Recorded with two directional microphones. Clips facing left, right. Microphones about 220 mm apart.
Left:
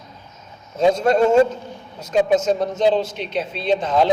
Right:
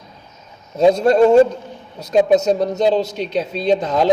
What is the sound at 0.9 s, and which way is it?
A man's voice, 40° right (ahead or behind).